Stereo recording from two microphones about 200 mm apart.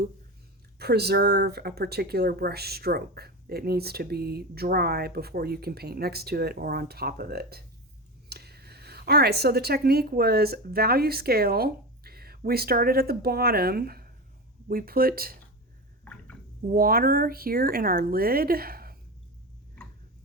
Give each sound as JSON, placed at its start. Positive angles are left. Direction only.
{"t": 0.8, "sound": "a woman's voice", "side_deg": -55}
{"t": 16.6, "sound": "speech", "side_deg": -45}